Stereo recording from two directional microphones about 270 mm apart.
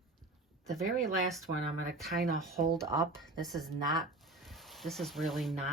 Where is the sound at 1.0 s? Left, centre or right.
Right.